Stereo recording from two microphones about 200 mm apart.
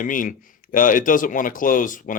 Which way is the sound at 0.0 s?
40° left (ahead or behind).